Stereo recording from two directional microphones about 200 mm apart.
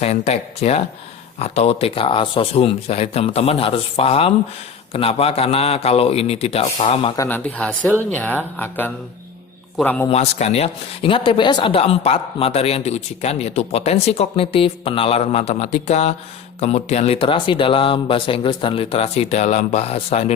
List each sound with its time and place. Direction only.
0.0 s speech: 30° left (ahead or behind)
7.2 s speech: 10° left (ahead or behind)
10.1 s speech: 35° left (ahead or behind)